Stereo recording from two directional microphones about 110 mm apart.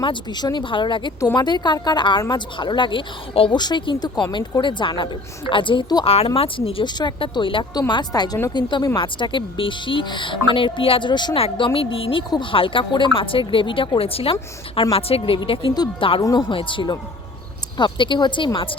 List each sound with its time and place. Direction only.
0.0 s a woman's voice: 45° left (ahead or behind)
3.6 s speech: 45° left (ahead or behind)
6.1 s speech: 60° left (ahead or behind)
6.8 s speech: 40° left (ahead or behind)
7.7 s a woman's voice: 40° left (ahead or behind)
11.3 s speech: 55° left (ahead or behind)
16.2 s a woman's voice: 35° left (ahead or behind)
16.6 s speech: 50° left (ahead or behind)